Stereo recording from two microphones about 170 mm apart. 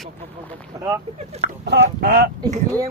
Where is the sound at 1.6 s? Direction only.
85° right; by 2.3 s 65° right (ahead or behind).